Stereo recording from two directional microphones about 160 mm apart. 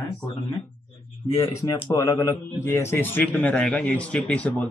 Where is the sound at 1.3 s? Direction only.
15° left (ahead or behind).